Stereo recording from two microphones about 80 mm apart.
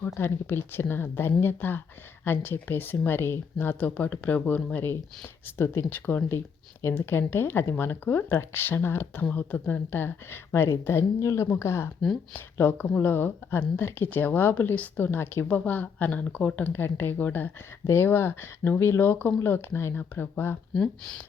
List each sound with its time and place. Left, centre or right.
0.1 s a woman's voice: left
12.3 s speech: left
20.7 s speech: centre